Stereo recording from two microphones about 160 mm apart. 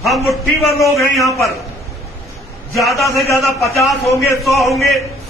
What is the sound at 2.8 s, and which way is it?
A man's voice, centre (ahead or behind).